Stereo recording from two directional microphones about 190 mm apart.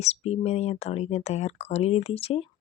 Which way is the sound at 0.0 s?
35° left (ahead or behind).